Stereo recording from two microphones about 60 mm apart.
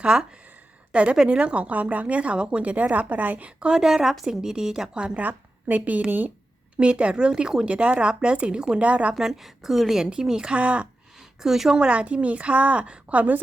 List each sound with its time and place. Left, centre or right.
0.0 s a woman's voice: centre
5.2 s speech: right
6.7 s a woman's voice: centre
9.1 s a woman's voice: centre
11.2 s speech: centre
11.8 s speech: right